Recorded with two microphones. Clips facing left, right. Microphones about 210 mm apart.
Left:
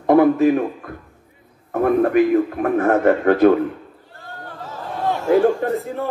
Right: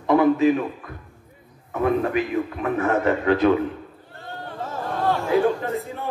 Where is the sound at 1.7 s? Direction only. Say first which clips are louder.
Left 5 dB; 50° left (ahead or behind).